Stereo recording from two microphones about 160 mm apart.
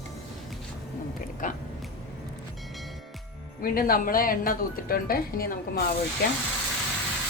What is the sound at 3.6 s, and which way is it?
Speech, 65° left (ahead or behind).